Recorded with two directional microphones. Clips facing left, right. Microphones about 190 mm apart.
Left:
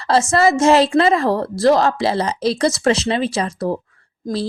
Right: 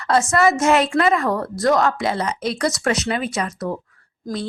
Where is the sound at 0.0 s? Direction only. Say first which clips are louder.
Left 2 dB; 30° left (ahead or behind).